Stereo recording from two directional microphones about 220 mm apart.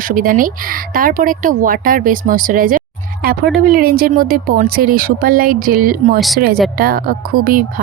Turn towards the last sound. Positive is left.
turn(degrees=-40)  # may be behind; listen again after turning